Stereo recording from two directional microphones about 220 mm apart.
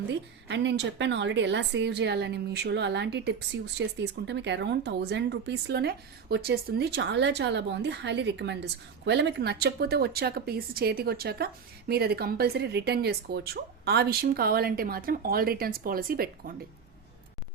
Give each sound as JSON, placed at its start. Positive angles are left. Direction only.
{"t": 0.1, "sound": "a woman's voice", "side_deg": -50}